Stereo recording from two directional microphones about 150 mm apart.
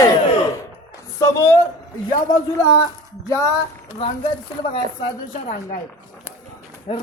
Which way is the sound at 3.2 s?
20° left (ahead or behind).